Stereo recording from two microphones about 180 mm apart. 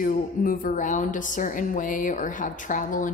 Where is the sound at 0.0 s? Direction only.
50° left (ahead or behind).